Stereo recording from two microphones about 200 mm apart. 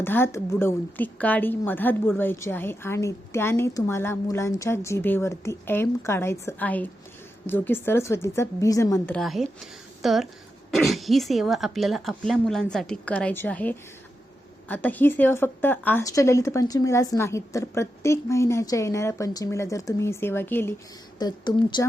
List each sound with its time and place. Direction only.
0.0 s a woman's voice: 10° left (ahead or behind)
21.2 s speech: 20° left (ahead or behind)